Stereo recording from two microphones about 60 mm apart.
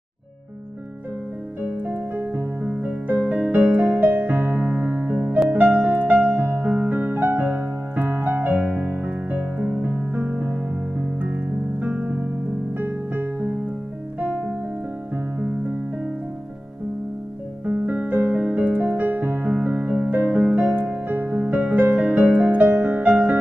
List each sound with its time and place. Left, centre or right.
1.6 s music: right
17.6 s music: right